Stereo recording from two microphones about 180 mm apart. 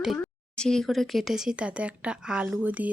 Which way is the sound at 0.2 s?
5° left (ahead or behind).